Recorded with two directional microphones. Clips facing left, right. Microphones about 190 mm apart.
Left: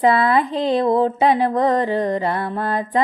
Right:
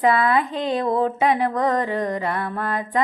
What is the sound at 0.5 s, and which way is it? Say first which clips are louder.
Music: left 4 dB; 30° left (ahead or behind).